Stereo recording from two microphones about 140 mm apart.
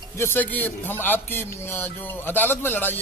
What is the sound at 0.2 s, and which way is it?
A man's voice, 15° left (ahead or behind).